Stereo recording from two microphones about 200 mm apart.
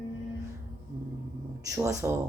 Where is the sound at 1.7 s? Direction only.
15° right (ahead or behind).